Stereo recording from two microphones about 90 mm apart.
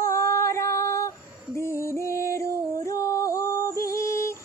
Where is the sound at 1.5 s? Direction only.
30° left (ahead or behind).